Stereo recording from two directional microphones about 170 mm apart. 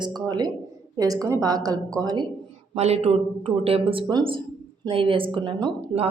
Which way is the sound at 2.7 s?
35° right (ahead or behind).